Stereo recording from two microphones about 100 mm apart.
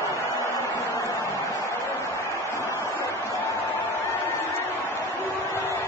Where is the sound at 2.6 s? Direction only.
25° right (ahead or behind).